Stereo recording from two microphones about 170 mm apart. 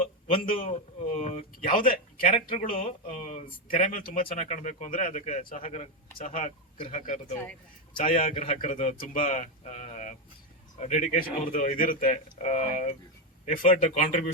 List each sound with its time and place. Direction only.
0.6 s a man's voice: 40° left (ahead or behind)